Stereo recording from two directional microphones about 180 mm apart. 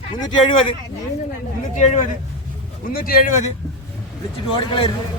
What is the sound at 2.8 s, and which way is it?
Speech, 55° left (ahead or behind).